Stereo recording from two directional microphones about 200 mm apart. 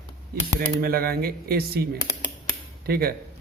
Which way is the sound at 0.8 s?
50° right (ahead or behind).